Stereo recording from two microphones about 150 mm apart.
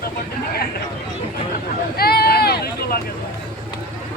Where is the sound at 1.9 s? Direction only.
90° left.